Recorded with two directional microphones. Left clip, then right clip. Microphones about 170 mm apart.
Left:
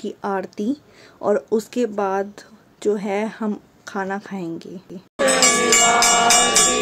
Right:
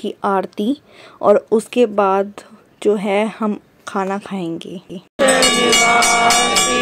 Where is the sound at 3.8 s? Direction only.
25° right (ahead or behind).